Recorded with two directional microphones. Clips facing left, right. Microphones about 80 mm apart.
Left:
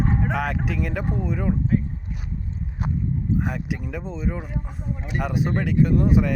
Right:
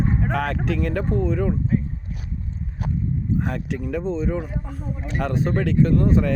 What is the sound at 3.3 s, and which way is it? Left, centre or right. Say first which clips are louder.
Speech: right 1 dB; centre.